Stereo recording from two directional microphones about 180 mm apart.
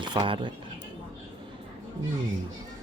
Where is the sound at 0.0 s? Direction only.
25° right (ahead or behind).